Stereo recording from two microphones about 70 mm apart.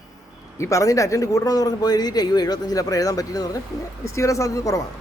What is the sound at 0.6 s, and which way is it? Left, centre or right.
A man's voice, left.